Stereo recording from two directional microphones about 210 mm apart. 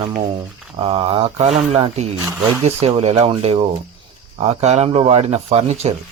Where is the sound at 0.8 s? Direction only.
25° right (ahead or behind).